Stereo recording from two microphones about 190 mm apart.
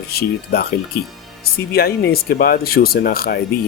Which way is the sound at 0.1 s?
55° left (ahead or behind).